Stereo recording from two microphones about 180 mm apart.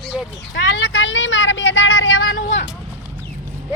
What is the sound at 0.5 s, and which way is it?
A woman's voice, 85° left.